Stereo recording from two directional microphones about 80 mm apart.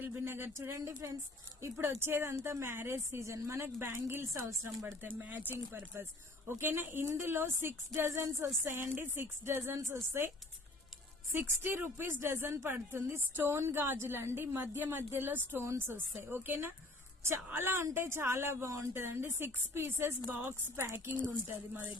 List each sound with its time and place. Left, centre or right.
0.0 s a woman's voice: right